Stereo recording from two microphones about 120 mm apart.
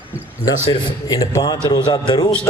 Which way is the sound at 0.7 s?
30° left (ahead or behind).